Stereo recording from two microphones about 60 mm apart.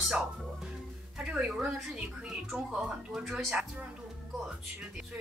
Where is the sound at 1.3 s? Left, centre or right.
Centre.